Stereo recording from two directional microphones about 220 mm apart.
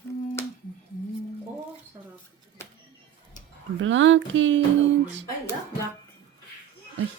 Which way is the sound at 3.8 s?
60° right (ahead or behind).